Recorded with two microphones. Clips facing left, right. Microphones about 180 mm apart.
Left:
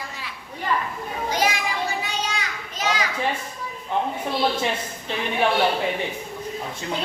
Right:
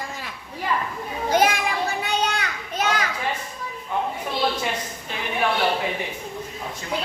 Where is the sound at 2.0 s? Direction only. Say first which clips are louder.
Right 4 dB; 60° right (ahead or behind).